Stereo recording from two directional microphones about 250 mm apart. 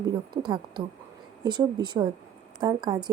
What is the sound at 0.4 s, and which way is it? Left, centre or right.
Speech, centre.